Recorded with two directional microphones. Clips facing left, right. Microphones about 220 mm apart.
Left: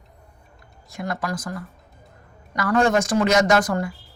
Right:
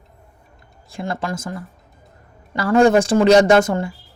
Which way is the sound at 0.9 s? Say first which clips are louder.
Right 2 dB; 25° right (ahead or behind).